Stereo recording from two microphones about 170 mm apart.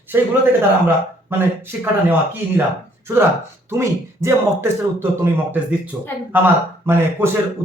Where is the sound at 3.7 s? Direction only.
15° right (ahead or behind).